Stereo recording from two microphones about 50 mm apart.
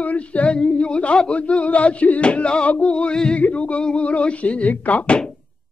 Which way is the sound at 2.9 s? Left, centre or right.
Centre.